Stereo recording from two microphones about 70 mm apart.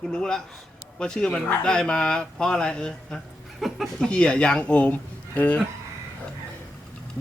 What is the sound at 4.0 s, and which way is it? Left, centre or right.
Speech, centre.